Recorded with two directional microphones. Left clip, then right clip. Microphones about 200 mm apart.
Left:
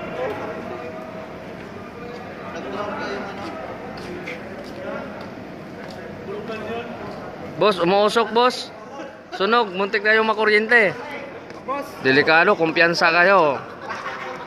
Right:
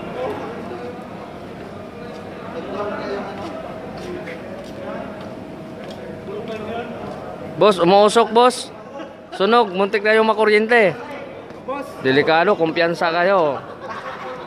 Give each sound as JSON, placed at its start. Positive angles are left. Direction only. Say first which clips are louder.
{"t": 7.5, "sound": "a man's voice", "louder": "right 5 dB", "side_deg": -15}
{"t": 12.0, "sound": "speech", "louder": "even", "side_deg": -5}